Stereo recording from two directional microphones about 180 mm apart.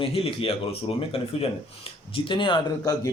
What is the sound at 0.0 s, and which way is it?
Speech, 30° left (ahead or behind).